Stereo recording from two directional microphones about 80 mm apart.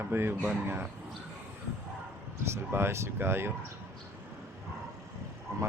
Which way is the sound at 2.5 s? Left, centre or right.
Right.